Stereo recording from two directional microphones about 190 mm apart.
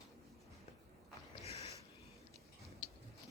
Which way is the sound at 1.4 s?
35° left (ahead or behind).